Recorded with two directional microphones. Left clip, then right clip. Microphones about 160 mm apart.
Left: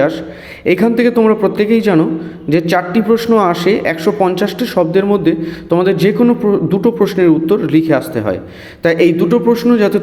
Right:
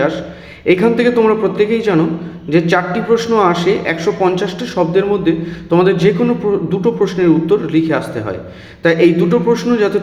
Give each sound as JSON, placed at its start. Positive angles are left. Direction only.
{"t": 0.6, "sound": "a man's voice", "side_deg": 50}